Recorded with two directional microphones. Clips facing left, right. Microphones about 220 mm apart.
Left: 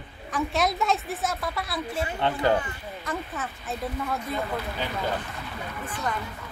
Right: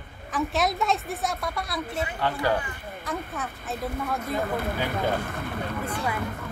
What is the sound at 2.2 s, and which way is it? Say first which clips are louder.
Speech: left 3 dB; 20° left (ahead or behind).